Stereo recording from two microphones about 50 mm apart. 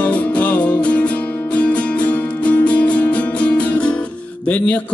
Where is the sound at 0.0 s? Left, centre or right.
Left.